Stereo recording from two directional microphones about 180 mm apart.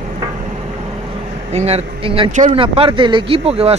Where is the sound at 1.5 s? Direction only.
35° right (ahead or behind).